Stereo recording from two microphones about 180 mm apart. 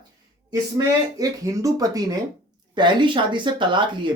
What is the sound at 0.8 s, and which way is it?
Speech, 20° right (ahead or behind).